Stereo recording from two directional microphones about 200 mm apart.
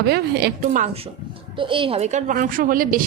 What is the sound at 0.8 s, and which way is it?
Speech, 30° right (ahead or behind).